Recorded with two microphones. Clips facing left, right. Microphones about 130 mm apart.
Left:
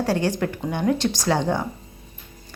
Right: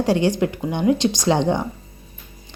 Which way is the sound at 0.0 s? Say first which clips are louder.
Right 4 dB; 15° right (ahead or behind).